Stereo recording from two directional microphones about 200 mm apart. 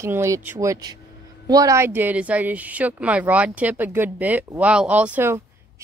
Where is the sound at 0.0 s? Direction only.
15° right (ahead or behind).